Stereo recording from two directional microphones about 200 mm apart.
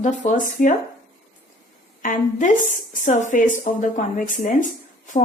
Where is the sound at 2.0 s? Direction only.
40° left (ahead or behind).